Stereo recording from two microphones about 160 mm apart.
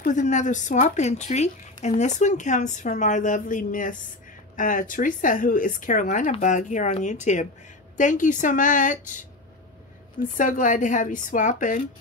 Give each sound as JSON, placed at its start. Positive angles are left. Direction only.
{"t": 0.0, "sound": "speech", "side_deg": 50}
{"t": 10.3, "sound": "speech", "side_deg": 55}